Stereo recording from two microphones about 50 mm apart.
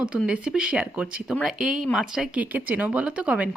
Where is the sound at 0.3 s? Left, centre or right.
Centre.